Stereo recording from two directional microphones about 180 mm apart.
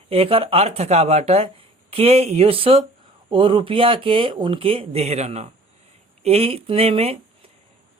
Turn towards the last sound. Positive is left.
turn(degrees=-35)  # may be behind; listen again after turning